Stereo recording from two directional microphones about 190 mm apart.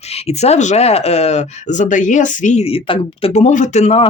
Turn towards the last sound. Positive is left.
turn(degrees=35)  # may be behind; listen again after turning